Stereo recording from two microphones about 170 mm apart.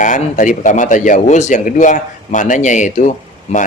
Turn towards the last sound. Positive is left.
turn(degrees=45)  # may be behind; listen again after turning